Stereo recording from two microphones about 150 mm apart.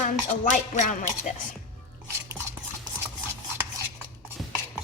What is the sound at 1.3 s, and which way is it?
Speech, 50° left (ahead or behind).